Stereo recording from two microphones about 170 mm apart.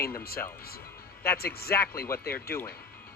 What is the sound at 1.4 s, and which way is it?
Speech, 65° left (ahead or behind).